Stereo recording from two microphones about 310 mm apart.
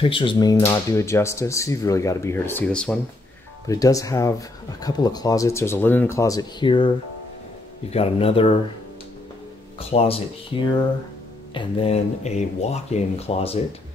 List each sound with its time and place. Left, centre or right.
0.0 s speech: centre
7.9 s speech: centre
9.8 s speech: centre